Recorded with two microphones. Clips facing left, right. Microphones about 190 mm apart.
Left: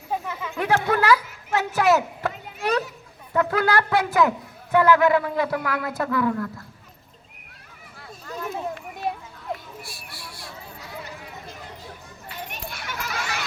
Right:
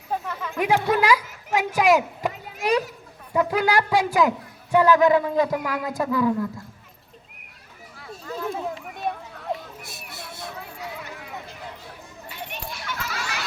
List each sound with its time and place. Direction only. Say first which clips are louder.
0.1 s chatter: even; 5° left (ahead or behind)
0.5 s a child's voice: right 1 dB; 10° right (ahead or behind)
8.3 s speech: right 2 dB; centre (ahead or behind)
9.8 s a sound: right 2 dB; 20° right (ahead or behind)
12.5 s children playing: right 1 dB; 45° left (ahead or behind)